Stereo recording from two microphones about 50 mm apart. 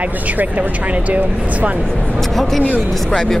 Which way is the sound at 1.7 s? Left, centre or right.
Left.